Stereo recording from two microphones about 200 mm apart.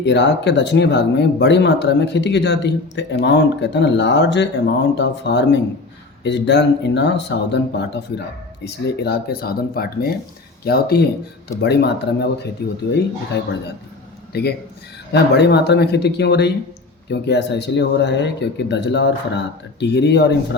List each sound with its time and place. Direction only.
0.0 s speech: 60° left (ahead or behind)
15.1 s speech: 55° left (ahead or behind)